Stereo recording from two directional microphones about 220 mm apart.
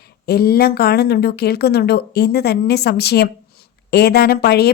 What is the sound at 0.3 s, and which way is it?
A woman's voice, 45° left (ahead or behind).